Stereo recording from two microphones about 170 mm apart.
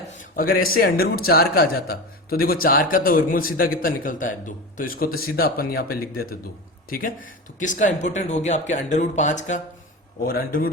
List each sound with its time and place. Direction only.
0.2 s speech: 60° left (ahead or behind)
10.2 s speech: 60° left (ahead or behind)